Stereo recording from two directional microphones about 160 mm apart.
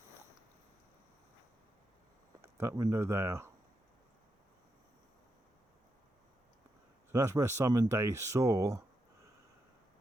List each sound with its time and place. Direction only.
2.4 s speech: 15° right (ahead or behind)
7.1 s speech: 20° right (ahead or behind)